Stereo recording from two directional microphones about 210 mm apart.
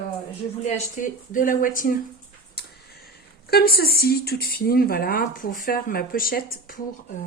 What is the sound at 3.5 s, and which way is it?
Speech, 45° left (ahead or behind).